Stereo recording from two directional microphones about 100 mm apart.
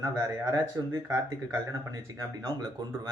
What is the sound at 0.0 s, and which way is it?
Speech, 30° right (ahead or behind).